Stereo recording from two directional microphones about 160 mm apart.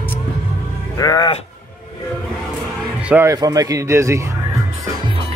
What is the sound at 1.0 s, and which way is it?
Speech, 25° left (ahead or behind).